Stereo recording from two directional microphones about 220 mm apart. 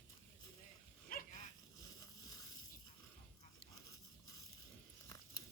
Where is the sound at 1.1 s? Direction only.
40° left (ahead or behind).